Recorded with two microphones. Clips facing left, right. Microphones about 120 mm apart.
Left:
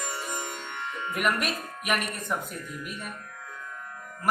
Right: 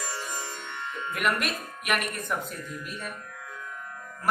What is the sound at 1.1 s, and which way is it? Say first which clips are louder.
Speech: left 1 dB; centre (ahead or behind).